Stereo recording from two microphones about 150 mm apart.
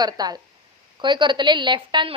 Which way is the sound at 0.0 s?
25° right (ahead or behind).